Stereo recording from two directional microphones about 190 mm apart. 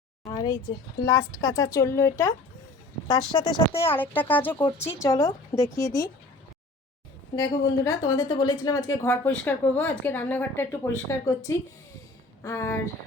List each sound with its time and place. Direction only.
0.3 s speech: 20° left (ahead or behind)
3.8 s speech: 10° left (ahead or behind)
7.3 s speech: 15° left (ahead or behind)